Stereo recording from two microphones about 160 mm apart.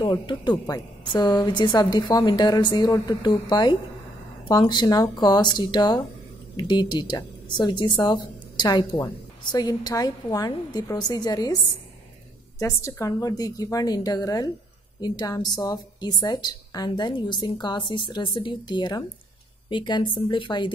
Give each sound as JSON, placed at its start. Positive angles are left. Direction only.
{"t": 0.0, "sound": "a woman's voice", "side_deg": 25}
{"t": 12.5, "sound": "a woman's voice", "side_deg": 20}